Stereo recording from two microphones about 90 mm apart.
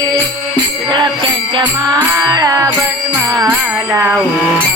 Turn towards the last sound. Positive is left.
turn(degrees=-40)  # may be behind; listen again after turning